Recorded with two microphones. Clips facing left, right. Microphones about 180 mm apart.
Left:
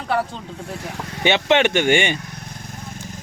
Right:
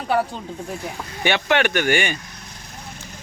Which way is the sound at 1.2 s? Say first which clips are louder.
Left 3 dB; 20° left (ahead or behind).